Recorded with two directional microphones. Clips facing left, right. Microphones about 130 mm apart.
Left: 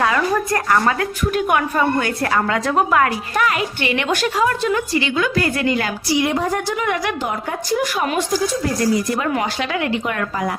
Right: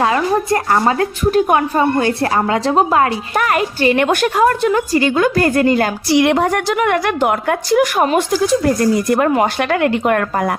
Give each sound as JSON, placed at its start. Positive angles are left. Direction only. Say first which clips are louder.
{"t": 0.0, "sound": "a woman's voice", "louder": "right 3 dB", "side_deg": -25}
{"t": 3.3, "sound": "a woman's voice", "louder": "right 5 dB", "side_deg": -45}
{"t": 4.7, "sound": "a woman's voice", "louder": "right 5 dB", "side_deg": -40}
{"t": 6.1, "sound": "a woman's voice", "louder": "right 5 dB", "side_deg": -70}
{"t": 8.4, "sound": "a woman's voice", "louder": "right 6 dB", "side_deg": -60}